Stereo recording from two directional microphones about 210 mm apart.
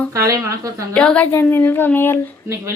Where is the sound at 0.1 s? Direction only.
15° right (ahead or behind).